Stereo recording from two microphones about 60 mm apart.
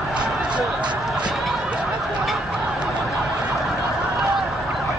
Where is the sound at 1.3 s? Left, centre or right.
Centre.